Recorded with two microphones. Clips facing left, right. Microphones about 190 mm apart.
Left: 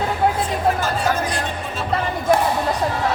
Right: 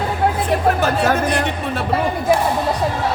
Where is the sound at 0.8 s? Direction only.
65° right (ahead or behind).